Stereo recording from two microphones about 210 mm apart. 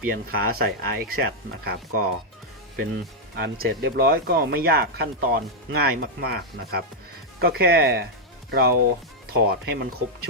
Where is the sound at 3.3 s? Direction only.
50° right (ahead or behind).